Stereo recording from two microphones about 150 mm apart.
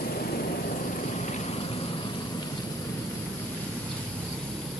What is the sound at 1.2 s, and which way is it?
Vehicle, 50° left (ahead or behind).